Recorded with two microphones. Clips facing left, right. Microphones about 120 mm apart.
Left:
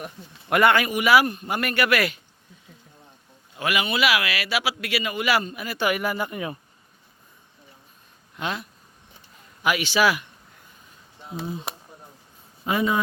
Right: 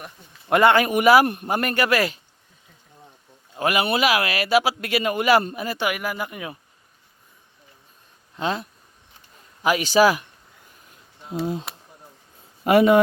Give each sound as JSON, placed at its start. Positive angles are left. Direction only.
{"t": 0.4, "sound": "a man's voice", "side_deg": -30}
{"t": 0.9, "sound": "a man's voice", "side_deg": -45}
{"t": 3.5, "sound": "a man's voice", "side_deg": -40}
{"t": 5.8, "sound": "speech", "side_deg": -10}
{"t": 8.4, "sound": "speech", "side_deg": -35}
{"t": 9.6, "sound": "speech", "side_deg": -40}
{"t": 12.6, "sound": "a man's voice", "side_deg": -70}